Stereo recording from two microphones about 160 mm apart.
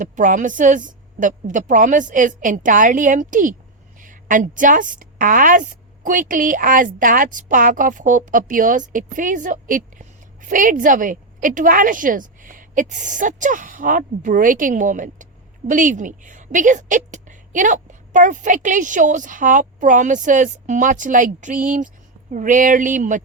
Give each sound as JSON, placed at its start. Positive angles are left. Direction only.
{"t": 0.0, "sound": "a woman's voice", "side_deg": -55}